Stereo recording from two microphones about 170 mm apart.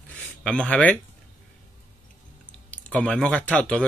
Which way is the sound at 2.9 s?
5° left (ahead or behind).